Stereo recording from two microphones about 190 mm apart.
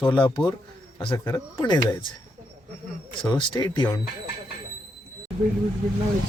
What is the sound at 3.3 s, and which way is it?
Speech, 20° left (ahead or behind).